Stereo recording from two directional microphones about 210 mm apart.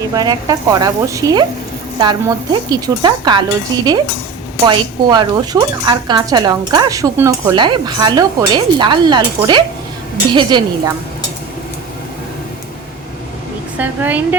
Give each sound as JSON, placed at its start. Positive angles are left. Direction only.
{"t": 0.2, "sound": "speech", "side_deg": -20}
{"t": 4.6, "sound": "speech", "side_deg": -20}
{"t": 13.7, "sound": "speech", "side_deg": -10}